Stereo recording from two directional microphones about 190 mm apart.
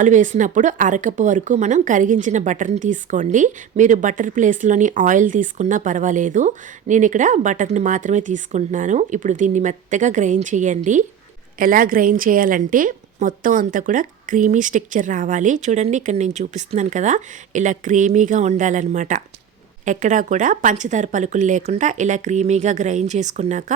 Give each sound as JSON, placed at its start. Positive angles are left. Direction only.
{"t": 0.0, "sound": "speech", "side_deg": -40}